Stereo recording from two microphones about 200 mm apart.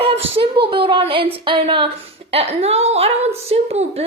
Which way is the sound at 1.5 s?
25° right (ahead or behind).